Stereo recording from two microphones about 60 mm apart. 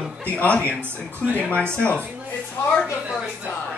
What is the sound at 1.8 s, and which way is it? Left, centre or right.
Speech, left.